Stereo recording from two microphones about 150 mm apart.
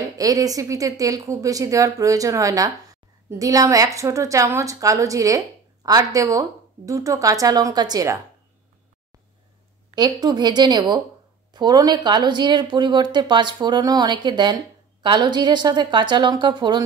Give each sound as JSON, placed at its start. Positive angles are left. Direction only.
{"t": 0.0, "sound": "speech", "side_deg": -25}
{"t": 9.9, "sound": "speech", "side_deg": -30}